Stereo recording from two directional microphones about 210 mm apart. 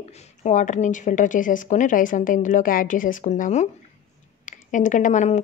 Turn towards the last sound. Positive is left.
turn(degrees=35)  # may be behind; listen again after turning